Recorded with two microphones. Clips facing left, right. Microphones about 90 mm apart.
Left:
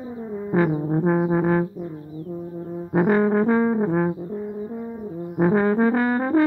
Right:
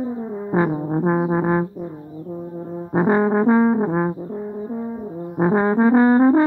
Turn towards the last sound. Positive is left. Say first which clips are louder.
# right 7 dB
turn(degrees=-25)  # may be behind; listen again after turning